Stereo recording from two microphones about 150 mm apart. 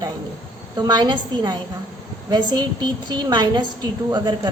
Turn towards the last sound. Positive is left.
turn(degrees=-30)  # may be behind; listen again after turning